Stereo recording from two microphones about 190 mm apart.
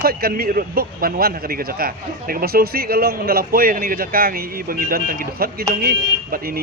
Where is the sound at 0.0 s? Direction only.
50° right (ahead or behind).